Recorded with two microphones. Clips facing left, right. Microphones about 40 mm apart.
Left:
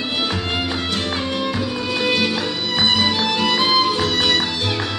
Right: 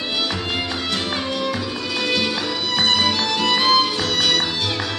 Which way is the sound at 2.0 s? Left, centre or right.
Centre.